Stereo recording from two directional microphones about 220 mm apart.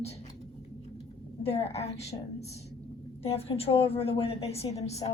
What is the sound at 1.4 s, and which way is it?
Speech, 30° left (ahead or behind).